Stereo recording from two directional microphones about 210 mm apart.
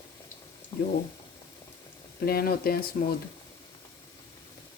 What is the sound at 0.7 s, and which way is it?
Speech, 15° left (ahead or behind).